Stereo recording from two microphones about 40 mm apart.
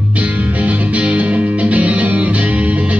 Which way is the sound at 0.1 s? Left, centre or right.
Right.